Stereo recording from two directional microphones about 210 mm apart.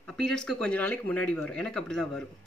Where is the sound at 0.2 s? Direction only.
5° left (ahead or behind).